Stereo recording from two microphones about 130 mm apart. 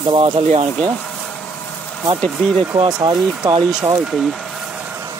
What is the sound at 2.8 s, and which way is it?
Speech, 35° right (ahead or behind).